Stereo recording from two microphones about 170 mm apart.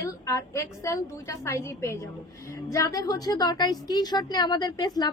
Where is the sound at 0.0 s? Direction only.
15° left (ahead or behind).